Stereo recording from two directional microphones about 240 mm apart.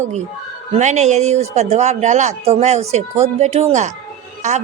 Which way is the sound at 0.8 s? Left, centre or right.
Right.